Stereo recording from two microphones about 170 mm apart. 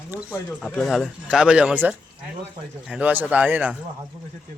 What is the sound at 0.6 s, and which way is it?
Speech, centre (ahead or behind).